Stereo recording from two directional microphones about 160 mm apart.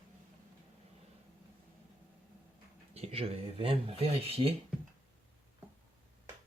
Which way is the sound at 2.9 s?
40° right (ahead or behind).